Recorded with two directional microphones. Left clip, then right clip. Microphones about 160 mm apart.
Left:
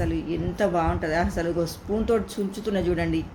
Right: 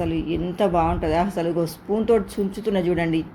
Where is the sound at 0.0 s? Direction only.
10° right (ahead or behind).